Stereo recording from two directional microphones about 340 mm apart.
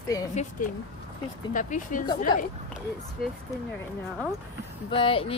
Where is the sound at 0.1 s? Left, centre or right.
Centre.